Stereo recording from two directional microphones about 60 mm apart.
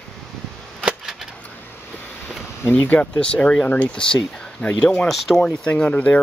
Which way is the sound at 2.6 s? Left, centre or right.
Left.